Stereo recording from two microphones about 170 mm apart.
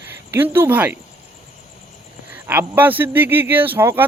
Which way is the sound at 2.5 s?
10° right (ahead or behind).